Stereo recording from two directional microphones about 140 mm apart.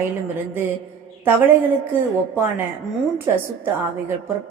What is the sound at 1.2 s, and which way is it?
Speech, 15° right (ahead or behind).